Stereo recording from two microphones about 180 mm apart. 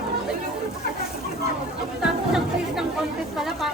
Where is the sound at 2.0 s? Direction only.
5° right (ahead or behind).